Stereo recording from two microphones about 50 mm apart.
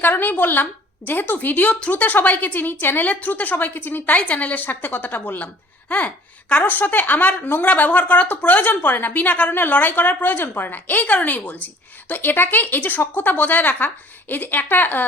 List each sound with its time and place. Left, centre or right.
0.0 s speech: left
6.5 s speech: left